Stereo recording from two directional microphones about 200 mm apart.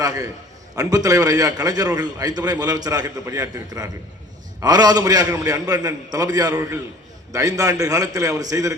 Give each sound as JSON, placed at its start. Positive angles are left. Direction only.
{"t": 0.0, "sound": "a man's voice", "side_deg": -20}